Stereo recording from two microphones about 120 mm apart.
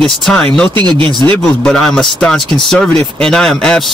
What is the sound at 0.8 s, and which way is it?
Speech, 40° right (ahead or behind).